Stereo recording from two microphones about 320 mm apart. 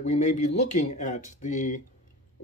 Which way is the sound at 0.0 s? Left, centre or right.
Left.